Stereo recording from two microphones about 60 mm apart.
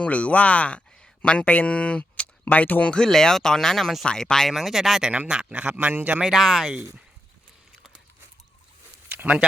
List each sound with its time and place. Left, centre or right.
0.0 s speech: left
3.1 s speech: centre
4.5 s speech: centre
5.3 s a man's voice: centre; by 6.1 s right
6.2 s speech: centre
9.0 s a sound: right